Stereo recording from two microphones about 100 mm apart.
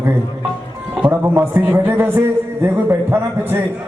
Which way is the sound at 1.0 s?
20° right (ahead or behind).